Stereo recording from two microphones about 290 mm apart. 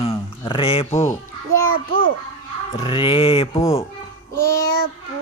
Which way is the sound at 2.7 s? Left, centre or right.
Centre.